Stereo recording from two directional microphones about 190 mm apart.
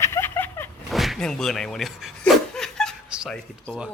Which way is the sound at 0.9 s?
Centre (ahead or behind).